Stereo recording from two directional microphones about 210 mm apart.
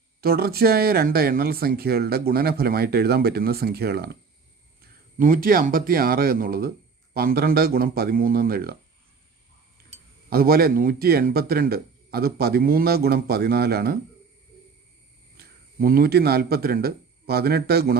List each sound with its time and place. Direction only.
0.2 s speech: 45° right (ahead or behind)
10.2 s speech: 45° right (ahead or behind)
15.8 s speech: 45° right (ahead or behind)